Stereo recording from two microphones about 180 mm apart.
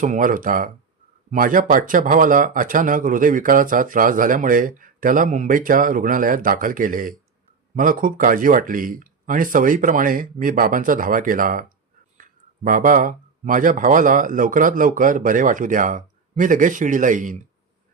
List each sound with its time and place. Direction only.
0.0 s speech: 45° right (ahead or behind)